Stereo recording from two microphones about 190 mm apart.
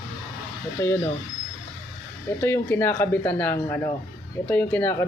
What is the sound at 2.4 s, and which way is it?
Speech, 10° left (ahead or behind).